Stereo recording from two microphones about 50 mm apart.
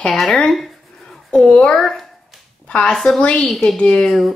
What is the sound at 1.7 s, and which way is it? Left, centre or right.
Speech, centre.